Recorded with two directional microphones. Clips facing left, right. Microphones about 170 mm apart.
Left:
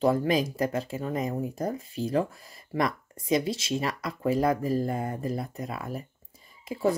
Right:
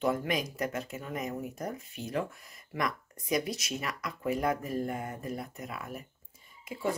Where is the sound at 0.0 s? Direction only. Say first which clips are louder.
Left 6 dB; 30° left (ahead or behind).